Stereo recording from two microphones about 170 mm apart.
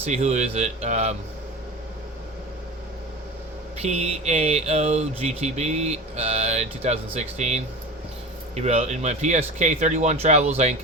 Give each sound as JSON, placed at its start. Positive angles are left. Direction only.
{"t": 0.0, "sound": "speech", "side_deg": -40}
{"t": 3.8, "sound": "speech", "side_deg": -40}